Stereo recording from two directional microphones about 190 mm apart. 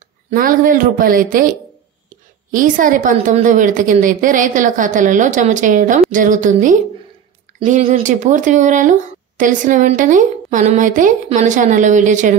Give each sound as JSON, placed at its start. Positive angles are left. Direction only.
{"t": 0.3, "sound": "a woman's voice", "side_deg": -45}
{"t": 2.5, "sound": "a woman's voice", "side_deg": -45}